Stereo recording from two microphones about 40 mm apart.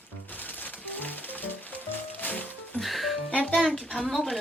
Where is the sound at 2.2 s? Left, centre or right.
Left.